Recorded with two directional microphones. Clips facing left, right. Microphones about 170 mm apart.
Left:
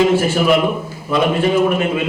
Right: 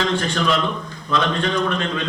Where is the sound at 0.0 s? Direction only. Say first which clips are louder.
Left 7 dB; 5° left (ahead or behind).